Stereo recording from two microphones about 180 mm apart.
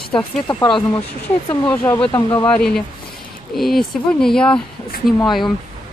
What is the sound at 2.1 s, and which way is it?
Speech, 20° left (ahead or behind).